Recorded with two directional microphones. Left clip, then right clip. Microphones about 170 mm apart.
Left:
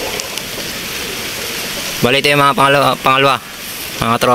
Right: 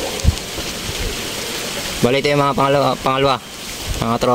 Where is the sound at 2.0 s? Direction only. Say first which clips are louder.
Left 5 dB; 10° right (ahead or behind).